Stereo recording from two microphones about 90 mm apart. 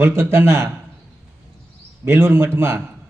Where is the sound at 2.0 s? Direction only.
25° right (ahead or behind).